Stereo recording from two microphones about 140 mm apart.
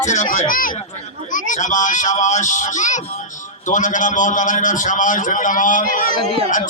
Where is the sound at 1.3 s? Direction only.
65° left (ahead or behind).